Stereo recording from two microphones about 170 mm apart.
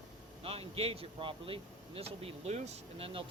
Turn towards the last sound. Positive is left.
turn(degrees=-35)  # may be behind; listen again after turning